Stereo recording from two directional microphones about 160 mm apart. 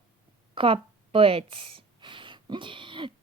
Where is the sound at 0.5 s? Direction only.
35° right (ahead or behind).